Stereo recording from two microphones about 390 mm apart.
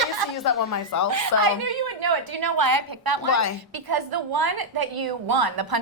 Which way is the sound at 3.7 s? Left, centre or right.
Right.